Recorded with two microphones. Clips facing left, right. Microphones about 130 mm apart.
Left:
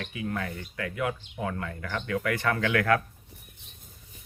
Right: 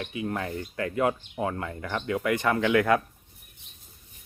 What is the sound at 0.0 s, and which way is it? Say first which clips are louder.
Speech: right 2 dB; 25° right (ahead or behind).